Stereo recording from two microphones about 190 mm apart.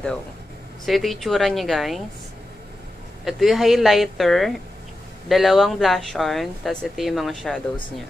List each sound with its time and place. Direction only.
0.8 s speech: centre (ahead or behind)
3.3 s speech: centre (ahead or behind)